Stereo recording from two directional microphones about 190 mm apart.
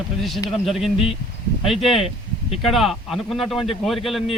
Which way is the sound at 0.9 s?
30° left (ahead or behind).